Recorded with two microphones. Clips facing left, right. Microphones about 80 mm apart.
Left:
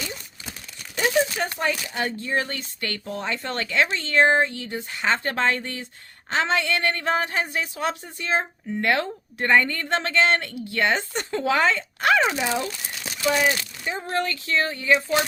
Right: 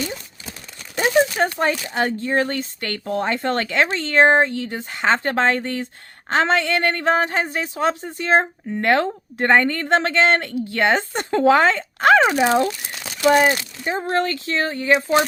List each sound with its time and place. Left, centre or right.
0.9 s a sound: right
1.5 s speech: right
12.3 s speech: right
13.2 s speech: right